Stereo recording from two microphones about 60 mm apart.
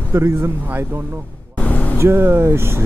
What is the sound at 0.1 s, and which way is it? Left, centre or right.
Speech, right.